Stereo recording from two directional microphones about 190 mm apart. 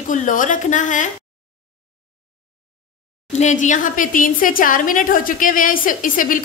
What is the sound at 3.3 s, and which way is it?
A woman's voice, 40° left (ahead or behind).